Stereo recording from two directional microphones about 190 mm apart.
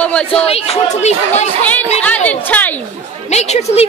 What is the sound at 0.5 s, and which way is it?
Speech, 30° left (ahead or behind).